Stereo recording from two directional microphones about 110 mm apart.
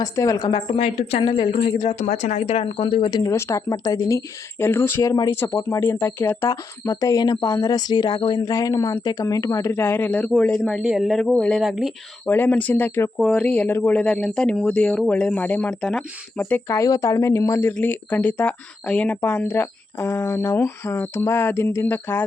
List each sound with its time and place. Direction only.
0.0 s speech: 30° left (ahead or behind)
0.4 s a woman's voice: 50° left (ahead or behind)
2.0 s speech: 90° left; by 3.3 s 40° left (ahead or behind)
3.3 s speech: 25° left (ahead or behind)
4.6 s speech: 20° left (ahead or behind)
6.5 s speech: 35° left (ahead or behind); by 10.2 s 15° left (ahead or behind)
10.7 s speech: 5° right (ahead or behind)
12.3 s speech: 15° left (ahead or behind)
14.0 s speech: 5° left (ahead or behind)
16.4 s speech: 20° left (ahead or behind)